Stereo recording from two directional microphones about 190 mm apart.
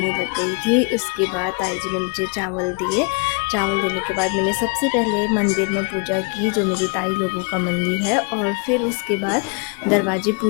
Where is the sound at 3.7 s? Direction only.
40° right (ahead or behind).